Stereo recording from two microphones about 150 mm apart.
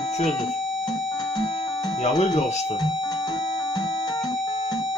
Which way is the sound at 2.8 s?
25° left (ahead or behind).